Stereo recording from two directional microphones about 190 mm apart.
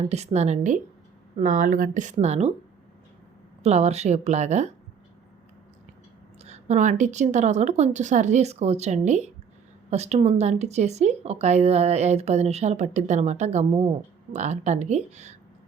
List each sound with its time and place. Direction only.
0.1 s speech: 35° right (ahead or behind)
3.6 s speech: 35° right (ahead or behind)
6.4 s speech: 35° right (ahead or behind)